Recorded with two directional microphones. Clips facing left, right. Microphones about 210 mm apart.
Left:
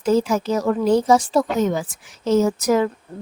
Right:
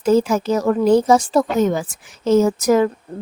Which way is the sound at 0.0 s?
50° right (ahead or behind).